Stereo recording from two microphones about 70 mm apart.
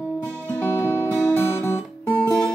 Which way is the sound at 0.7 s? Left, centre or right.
Left.